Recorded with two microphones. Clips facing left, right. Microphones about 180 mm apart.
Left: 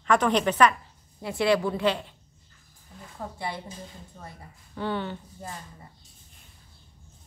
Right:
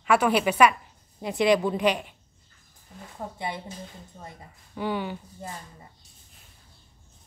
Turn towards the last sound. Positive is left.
turn(degrees=-10)  # may be behind; listen again after turning